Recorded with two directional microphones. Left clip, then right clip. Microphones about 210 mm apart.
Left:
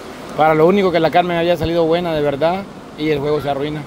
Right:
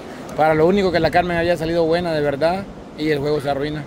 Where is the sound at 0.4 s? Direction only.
Centre (ahead or behind).